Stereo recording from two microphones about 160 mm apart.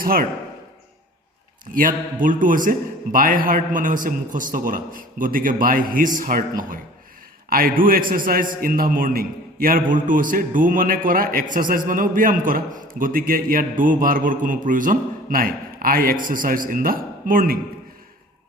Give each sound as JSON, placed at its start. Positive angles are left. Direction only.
{"t": 0.0, "sound": "speech", "side_deg": -65}
{"t": 1.7, "sound": "a man's voice", "side_deg": -60}